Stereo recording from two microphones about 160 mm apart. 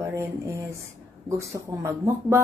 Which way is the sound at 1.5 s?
20° right (ahead or behind).